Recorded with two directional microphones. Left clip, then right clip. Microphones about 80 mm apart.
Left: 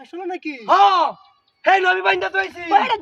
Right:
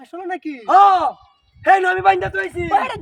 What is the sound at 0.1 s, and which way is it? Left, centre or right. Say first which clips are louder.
Speech: right 1 dB; right.